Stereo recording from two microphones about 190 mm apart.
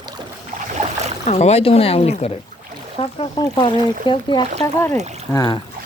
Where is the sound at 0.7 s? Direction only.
35° right (ahead or behind).